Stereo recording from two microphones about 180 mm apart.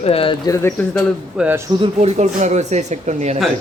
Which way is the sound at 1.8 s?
40° right (ahead or behind).